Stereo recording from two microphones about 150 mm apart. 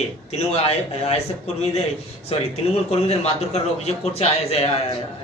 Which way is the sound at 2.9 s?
45° left (ahead or behind).